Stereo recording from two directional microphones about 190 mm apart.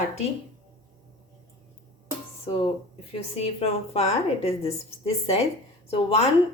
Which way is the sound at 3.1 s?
30° left (ahead or behind).